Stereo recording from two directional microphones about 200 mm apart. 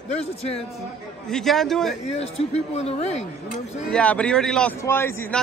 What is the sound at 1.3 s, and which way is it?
Speech, centre (ahead or behind).